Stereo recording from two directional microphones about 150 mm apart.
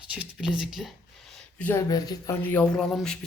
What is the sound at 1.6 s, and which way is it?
Speech, 20° left (ahead or behind).